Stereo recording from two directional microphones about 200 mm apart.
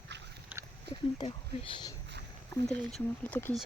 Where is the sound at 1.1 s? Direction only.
25° left (ahead or behind).